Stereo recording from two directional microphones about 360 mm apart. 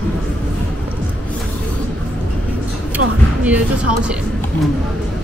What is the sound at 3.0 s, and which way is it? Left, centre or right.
Speech, right.